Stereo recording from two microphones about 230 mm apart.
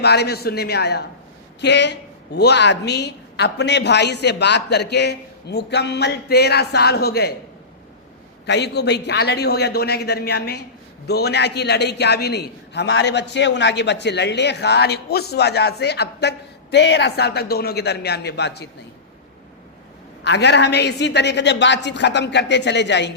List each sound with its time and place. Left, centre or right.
0.0 s a woman's voice: left
8.4 s a woman's voice: left
20.2 s a woman's voice: left